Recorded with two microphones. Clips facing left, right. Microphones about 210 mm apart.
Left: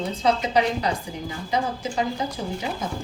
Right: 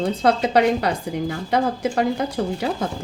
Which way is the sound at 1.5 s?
60° right (ahead or behind).